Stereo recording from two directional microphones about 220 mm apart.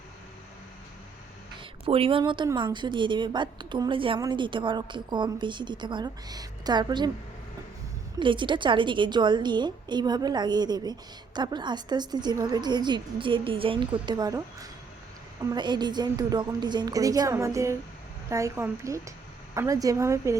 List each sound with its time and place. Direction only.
1.8 s a woman's voice: 25° right (ahead or behind)
8.2 s a woman's voice: 20° right (ahead or behind)